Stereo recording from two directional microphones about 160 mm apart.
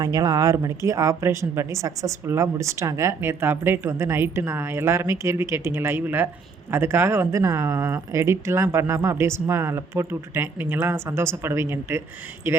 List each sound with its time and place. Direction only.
0.0 s a woman's voice: 25° right (ahead or behind)